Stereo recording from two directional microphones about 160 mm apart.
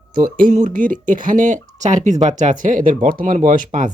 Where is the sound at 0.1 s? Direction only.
60° right (ahead or behind).